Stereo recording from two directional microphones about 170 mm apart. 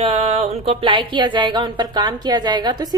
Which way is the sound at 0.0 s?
35° right (ahead or behind).